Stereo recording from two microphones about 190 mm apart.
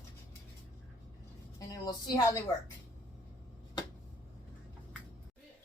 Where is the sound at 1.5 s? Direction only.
20° left (ahead or behind).